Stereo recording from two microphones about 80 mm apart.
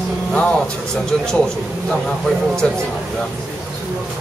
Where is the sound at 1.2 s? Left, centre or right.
Centre.